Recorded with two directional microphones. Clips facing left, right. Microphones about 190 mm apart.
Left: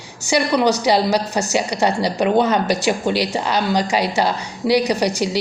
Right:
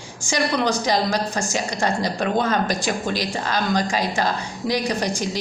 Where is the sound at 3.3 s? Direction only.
15° left (ahead or behind).